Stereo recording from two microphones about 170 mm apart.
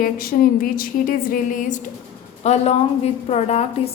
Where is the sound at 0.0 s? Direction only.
55° left (ahead or behind).